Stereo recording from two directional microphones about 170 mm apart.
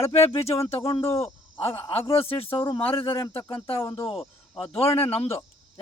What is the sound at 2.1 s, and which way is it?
Speech, 35° left (ahead or behind).